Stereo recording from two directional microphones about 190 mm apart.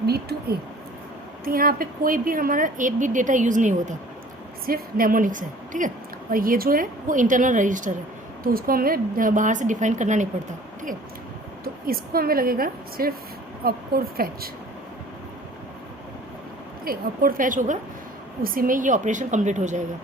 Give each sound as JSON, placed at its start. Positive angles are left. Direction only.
{"t": 0.0, "sound": "a woman's voice", "side_deg": -55}
{"t": 11.6, "sound": "a woman's voice", "side_deg": -50}
{"t": 16.8, "sound": "a woman's voice", "side_deg": -50}